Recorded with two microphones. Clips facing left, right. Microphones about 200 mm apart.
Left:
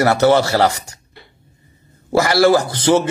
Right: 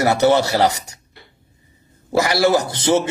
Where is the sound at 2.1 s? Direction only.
20° right (ahead or behind).